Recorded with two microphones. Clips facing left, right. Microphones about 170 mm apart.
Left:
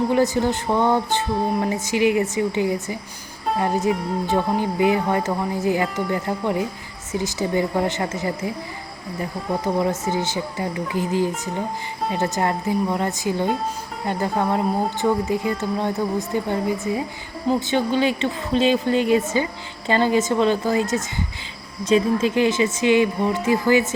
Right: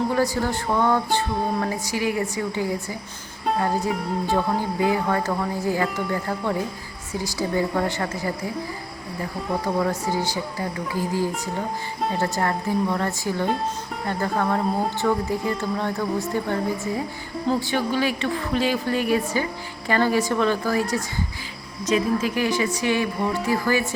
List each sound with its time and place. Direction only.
0.1 s speech: 20° left (ahead or behind)
9.7 s speech: 20° left (ahead or behind)